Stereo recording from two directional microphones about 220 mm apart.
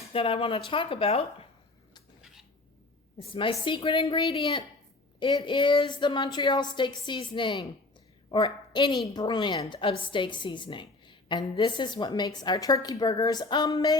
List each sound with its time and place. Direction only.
0.1 s a woman's voice: 25° left (ahead or behind)
3.2 s a woman's voice: 25° left (ahead or behind)